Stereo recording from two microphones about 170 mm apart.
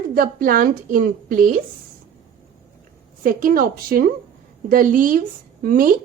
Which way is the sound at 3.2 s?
55° right (ahead or behind).